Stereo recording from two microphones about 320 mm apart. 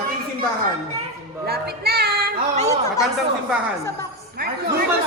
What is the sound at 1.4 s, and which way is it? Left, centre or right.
Speech, right.